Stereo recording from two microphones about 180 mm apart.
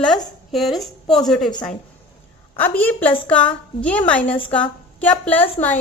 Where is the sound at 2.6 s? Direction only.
10° left (ahead or behind).